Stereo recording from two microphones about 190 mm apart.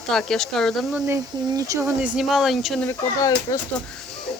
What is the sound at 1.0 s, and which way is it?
Speech, 15° right (ahead or behind).